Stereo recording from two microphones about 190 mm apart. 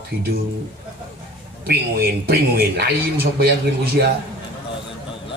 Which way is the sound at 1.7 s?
55° right (ahead or behind).